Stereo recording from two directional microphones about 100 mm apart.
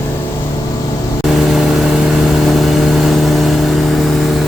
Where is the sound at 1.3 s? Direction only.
Centre (ahead or behind).